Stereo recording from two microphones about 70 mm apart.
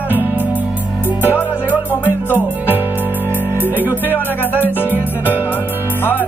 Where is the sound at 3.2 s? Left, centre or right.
Left.